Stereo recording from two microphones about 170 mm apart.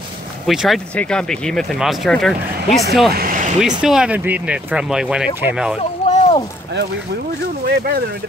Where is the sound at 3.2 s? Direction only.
55° right (ahead or behind).